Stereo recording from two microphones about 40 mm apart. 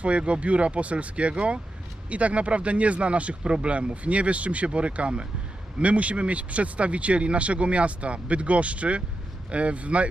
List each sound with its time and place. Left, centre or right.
0.0 s speech: right